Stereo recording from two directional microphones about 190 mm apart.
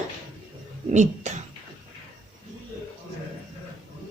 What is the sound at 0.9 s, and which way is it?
Speech, 40° right (ahead or behind).